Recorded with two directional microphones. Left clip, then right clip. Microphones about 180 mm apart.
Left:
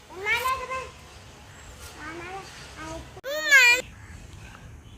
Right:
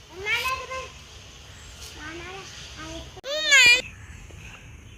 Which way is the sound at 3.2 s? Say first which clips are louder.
Right 1 dB; 85° left.